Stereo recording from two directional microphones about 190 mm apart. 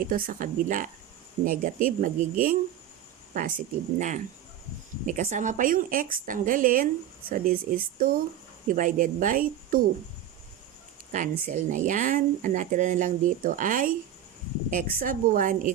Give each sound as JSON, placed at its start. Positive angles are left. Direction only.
{"t": 0.1, "sound": "speech", "side_deg": -50}
{"t": 11.1, "sound": "speech", "side_deg": -45}